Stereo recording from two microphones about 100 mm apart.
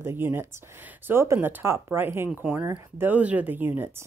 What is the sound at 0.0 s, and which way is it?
Speech, 20° right (ahead or behind).